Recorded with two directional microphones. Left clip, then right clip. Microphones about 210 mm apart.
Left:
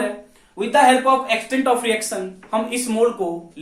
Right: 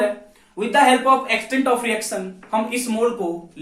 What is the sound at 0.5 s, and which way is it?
Speech, 15° left (ahead or behind).